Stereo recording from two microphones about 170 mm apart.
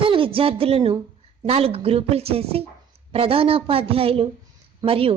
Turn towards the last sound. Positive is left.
turn(degrees=-35)  # may be behind; listen again after turning